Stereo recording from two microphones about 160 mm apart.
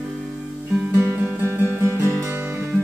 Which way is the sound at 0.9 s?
15° right (ahead or behind).